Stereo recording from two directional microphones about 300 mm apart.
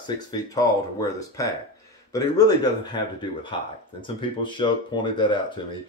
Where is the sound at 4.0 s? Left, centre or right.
Centre.